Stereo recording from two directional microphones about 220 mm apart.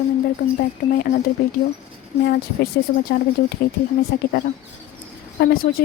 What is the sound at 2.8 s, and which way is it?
Speech, 45° left (ahead or behind).